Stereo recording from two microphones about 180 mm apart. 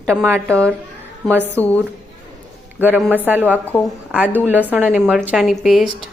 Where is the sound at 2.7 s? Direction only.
10° right (ahead or behind).